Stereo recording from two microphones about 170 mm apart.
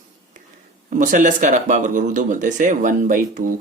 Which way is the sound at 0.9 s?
50° right (ahead or behind).